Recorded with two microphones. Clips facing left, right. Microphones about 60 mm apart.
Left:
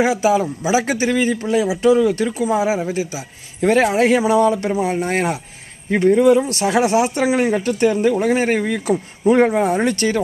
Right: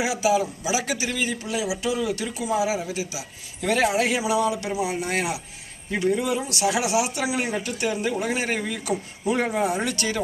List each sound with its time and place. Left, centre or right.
0.0 s speech: left